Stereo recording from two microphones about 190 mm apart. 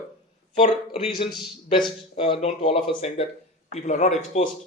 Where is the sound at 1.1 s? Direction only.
25° left (ahead or behind).